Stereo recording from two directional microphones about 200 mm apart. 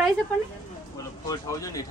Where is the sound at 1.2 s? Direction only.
15° left (ahead or behind).